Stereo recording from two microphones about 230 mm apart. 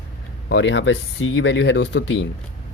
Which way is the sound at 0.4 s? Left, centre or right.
Left.